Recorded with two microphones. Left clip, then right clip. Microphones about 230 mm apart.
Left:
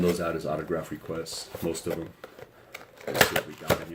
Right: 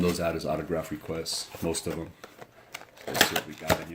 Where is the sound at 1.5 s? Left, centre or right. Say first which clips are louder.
Left 3 dB; centre.